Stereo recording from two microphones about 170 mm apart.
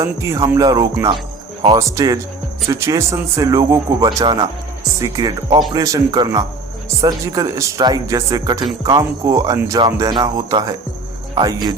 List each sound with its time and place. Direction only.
0.0 s speech: 20° right (ahead or behind)